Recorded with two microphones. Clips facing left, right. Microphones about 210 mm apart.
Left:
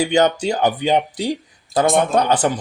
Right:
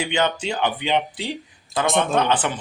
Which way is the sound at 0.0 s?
40° left (ahead or behind).